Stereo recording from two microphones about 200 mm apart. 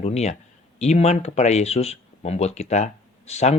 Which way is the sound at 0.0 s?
35° left (ahead or behind).